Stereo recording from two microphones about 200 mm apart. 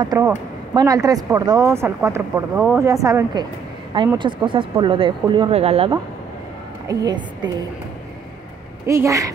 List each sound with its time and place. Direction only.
0.0 s speech: 20° right (ahead or behind)
6.9 s speech: 20° right (ahead or behind)
8.8 s speech: 15° right (ahead or behind)